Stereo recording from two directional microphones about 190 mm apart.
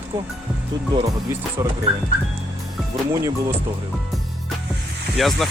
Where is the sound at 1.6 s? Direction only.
15° right (ahead or behind).